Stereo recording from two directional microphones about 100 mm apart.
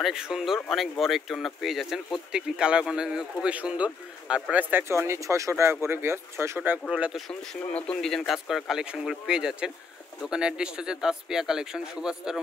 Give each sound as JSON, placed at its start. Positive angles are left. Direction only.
{"t": 0.0, "sound": "speech", "side_deg": -5}
{"t": 7.7, "sound": "speech", "side_deg": 10}